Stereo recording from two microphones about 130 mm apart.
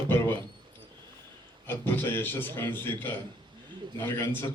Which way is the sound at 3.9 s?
20° left (ahead or behind).